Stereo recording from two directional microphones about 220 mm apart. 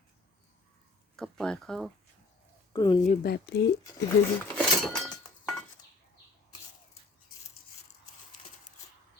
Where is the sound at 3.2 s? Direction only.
50° left (ahead or behind).